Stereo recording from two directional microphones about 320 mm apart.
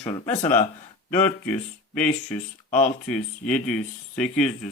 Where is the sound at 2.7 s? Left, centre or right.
Left.